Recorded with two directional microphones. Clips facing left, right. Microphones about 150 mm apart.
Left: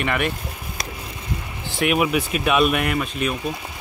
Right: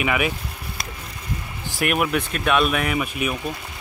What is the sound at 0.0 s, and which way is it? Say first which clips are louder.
Speech: right 1 dB; 5° right (ahead or behind).